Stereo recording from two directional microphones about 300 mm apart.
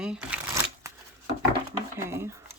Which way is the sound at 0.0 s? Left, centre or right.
Centre.